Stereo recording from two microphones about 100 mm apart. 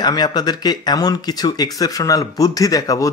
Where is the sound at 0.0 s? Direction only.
45° left (ahead or behind).